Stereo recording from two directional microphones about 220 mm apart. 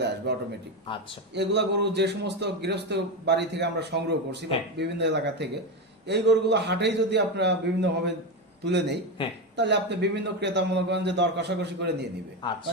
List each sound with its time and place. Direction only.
0.0 s a sound: 50° right (ahead or behind)
0.9 s speech: 20° left (ahead or behind)
1.3 s a man's voice: 50° right (ahead or behind)
9.2 s speech: 25° left (ahead or behind)
9.6 s a man's voice: 50° right (ahead or behind)